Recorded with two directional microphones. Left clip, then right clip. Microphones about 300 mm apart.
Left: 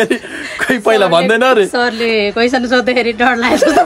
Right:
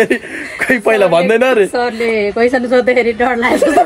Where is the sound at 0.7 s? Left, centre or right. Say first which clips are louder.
Even; left.